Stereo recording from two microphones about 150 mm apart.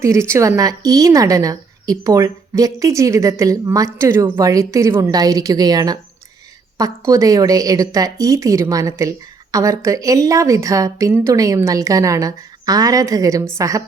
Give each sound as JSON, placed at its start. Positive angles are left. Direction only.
{"t": 0.0, "sound": "speech", "side_deg": -20}
{"t": 7.1, "sound": "speech", "side_deg": -20}